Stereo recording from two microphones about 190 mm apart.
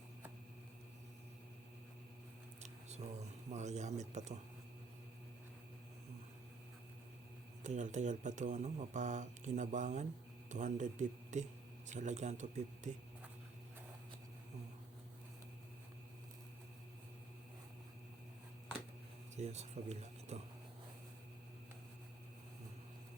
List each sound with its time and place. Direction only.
2.6 s a sound: 35° right (ahead or behind)
3.5 s speech: 35° right (ahead or behind)
7.6 s speech: 40° right (ahead or behind)
19.4 s speech: 35° right (ahead or behind)